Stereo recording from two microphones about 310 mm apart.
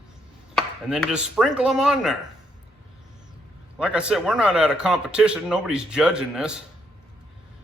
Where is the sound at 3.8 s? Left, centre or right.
Centre.